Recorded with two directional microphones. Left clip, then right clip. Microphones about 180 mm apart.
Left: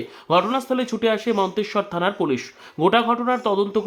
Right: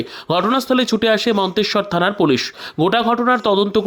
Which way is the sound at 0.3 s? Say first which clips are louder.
Right 3 dB; 35° right (ahead or behind).